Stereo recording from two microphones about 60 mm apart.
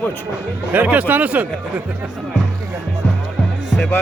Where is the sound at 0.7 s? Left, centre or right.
Right.